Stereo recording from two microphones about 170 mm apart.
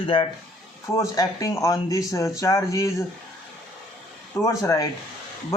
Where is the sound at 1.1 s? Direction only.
20° left (ahead or behind).